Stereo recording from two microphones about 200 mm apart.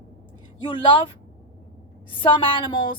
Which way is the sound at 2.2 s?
25° left (ahead or behind).